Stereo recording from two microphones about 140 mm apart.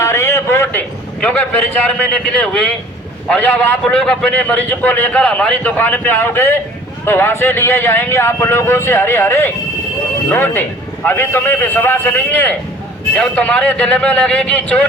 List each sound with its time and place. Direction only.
0.0 s a man's voice: 20° left (ahead or behind)